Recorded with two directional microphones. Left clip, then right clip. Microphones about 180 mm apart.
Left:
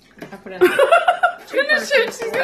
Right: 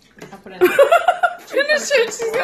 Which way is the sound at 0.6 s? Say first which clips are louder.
Right 1 dB; 15° right (ahead or behind).